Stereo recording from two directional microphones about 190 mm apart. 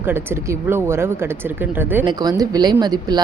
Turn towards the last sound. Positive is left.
turn(degrees=-20)  # may be behind; listen again after turning